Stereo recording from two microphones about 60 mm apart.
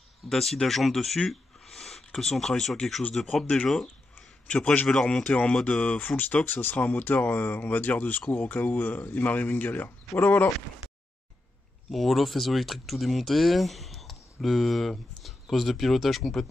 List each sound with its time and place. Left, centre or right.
0.3 s a man's voice: centre
4.5 s a man's voice: left
5.2 s a man's voice: left
11.9 s speech: centre